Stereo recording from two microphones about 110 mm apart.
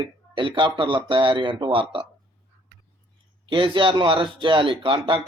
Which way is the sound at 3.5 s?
50° right (ahead or behind).